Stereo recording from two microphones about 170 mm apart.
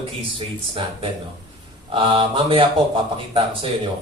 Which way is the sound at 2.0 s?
30° right (ahead or behind).